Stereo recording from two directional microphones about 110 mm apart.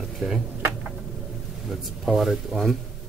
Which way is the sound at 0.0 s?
Centre (ahead or behind).